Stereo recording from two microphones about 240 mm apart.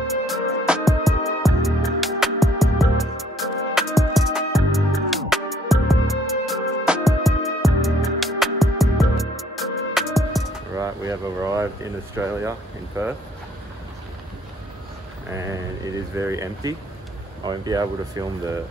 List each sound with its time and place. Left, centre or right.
0.3 s music: centre
10.8 s air conditioning: centre
15.3 s speech: centre